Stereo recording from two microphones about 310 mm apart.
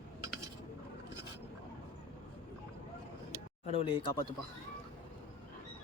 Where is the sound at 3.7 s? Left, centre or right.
Centre.